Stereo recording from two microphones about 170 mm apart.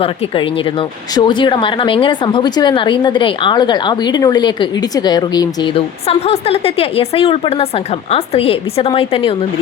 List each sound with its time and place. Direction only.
1.1 s a woman's voice: 25° left (ahead or behind)